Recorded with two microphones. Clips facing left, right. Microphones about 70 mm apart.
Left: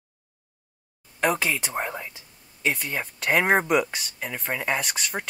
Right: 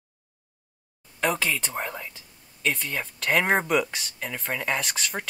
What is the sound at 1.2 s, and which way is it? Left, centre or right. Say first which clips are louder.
Speech: left 2 dB; centre.